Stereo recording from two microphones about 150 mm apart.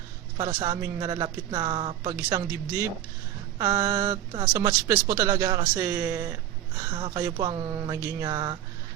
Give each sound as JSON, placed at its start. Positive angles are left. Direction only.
{"t": 0.3, "sound": "speech", "side_deg": -30}
{"t": 2.1, "sound": "speech", "side_deg": -15}
{"t": 6.7, "sound": "speech", "side_deg": -30}